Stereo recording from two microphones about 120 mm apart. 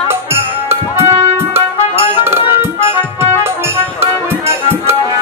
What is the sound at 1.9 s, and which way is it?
Music, 50° left (ahead or behind).